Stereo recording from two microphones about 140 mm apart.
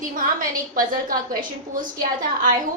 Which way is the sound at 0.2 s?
75° right (ahead or behind).